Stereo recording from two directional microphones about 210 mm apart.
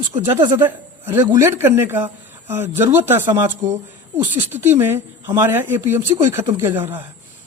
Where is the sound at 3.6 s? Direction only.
40° right (ahead or behind).